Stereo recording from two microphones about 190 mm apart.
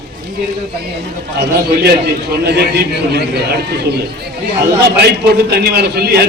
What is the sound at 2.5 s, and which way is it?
Speech, 55° right (ahead or behind).